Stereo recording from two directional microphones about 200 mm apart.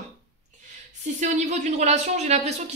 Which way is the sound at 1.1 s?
35° right (ahead or behind).